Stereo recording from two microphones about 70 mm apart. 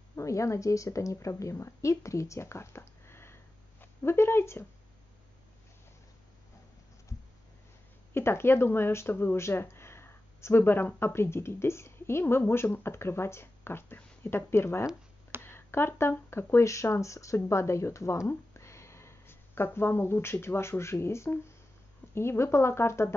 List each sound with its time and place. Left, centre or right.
0.1 s speech: left
8.1 s speech: left